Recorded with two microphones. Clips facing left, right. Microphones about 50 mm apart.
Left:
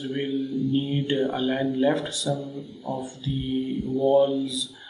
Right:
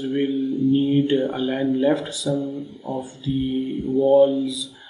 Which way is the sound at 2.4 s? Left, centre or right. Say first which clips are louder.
Right 6 dB; right.